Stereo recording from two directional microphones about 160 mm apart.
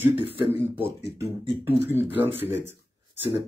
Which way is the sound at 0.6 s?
10° right (ahead or behind).